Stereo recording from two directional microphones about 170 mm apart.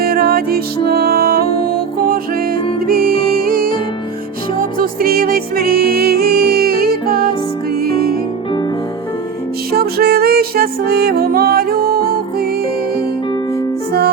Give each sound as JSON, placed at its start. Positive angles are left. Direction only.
{"t": 0.0, "sound": "music", "side_deg": -60}
{"t": 4.8, "sound": "music", "side_deg": -60}
{"t": 9.7, "sound": "music", "side_deg": -65}